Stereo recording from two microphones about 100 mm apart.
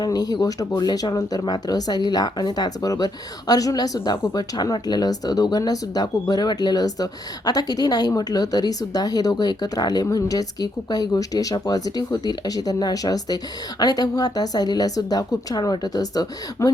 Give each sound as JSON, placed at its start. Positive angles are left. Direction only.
{"t": 0.0, "sound": "speech", "side_deg": 40}